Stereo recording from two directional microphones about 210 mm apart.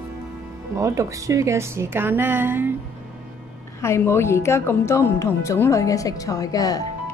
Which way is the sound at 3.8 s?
10° left (ahead or behind).